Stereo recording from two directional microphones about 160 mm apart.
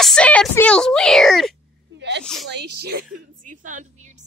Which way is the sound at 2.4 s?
90° right.